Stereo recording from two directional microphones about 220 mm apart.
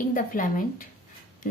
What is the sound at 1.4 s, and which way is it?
Music, 40° left (ahead or behind).